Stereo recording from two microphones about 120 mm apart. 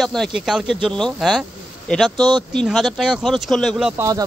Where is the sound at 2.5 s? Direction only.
Centre (ahead or behind).